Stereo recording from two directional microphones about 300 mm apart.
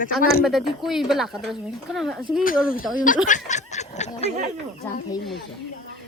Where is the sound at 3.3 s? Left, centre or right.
Left.